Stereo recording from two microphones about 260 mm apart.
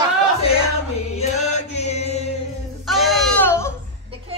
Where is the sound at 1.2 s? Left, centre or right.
Left.